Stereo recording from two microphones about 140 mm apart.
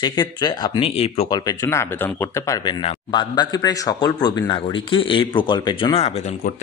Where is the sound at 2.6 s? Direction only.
35° left (ahead or behind).